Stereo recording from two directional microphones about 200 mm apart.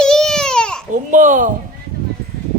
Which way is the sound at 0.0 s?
5° left (ahead or behind).